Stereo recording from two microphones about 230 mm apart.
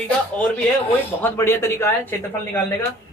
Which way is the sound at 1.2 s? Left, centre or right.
Centre.